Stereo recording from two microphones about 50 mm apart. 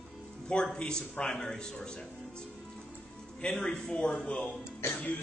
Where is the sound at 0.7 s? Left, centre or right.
Centre.